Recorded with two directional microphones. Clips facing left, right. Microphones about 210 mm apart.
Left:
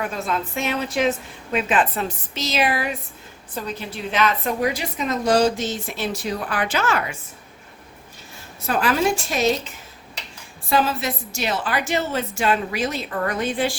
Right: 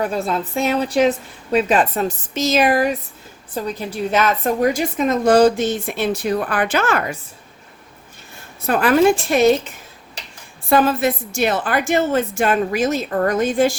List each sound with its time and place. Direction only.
0.0 s a woman's voice: 35° right (ahead or behind)
8.6 s a woman's voice: 55° right (ahead or behind)
10.7 s a woman's voice: 55° right (ahead or behind)